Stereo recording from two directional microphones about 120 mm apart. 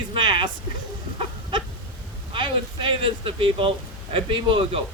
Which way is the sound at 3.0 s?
50° right (ahead or behind).